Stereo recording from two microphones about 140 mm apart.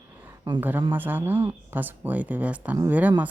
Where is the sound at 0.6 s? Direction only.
15° right (ahead or behind).